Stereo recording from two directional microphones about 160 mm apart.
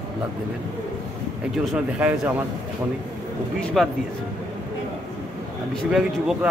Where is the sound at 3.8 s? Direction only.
Centre (ahead or behind).